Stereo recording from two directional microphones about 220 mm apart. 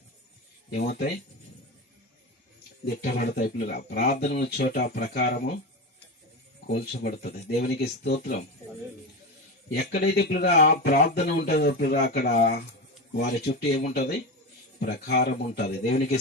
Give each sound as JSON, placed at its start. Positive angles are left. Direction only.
{"t": 0.7, "sound": "speech", "side_deg": 45}
{"t": 2.8, "sound": "speech", "side_deg": 45}
{"t": 6.7, "sound": "speech", "side_deg": 45}
{"t": 9.6, "sound": "speech", "side_deg": 50}